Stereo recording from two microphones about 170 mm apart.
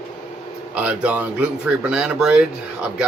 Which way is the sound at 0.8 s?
10° right (ahead or behind).